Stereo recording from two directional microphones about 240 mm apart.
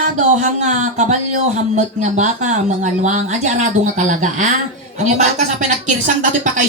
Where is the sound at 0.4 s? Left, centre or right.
Right.